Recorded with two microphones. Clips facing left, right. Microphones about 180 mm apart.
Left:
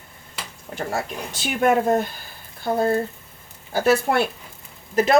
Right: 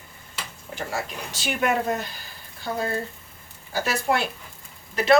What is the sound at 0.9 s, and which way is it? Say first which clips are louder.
Speech: left 4 dB; 50° left (ahead or behind).